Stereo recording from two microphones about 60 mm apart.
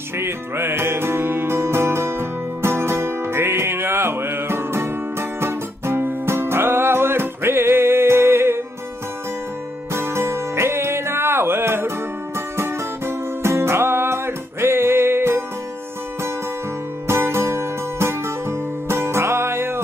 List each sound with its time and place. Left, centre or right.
0.2 s music: right
9.9 s music: right
17.1 s music: right